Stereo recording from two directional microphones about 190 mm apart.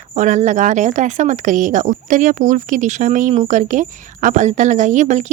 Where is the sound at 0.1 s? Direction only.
40° right (ahead or behind).